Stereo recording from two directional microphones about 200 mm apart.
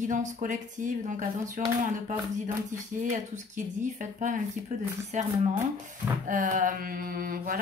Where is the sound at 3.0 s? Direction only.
40° right (ahead or behind).